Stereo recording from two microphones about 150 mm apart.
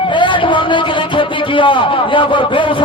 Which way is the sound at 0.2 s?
35° left (ahead or behind).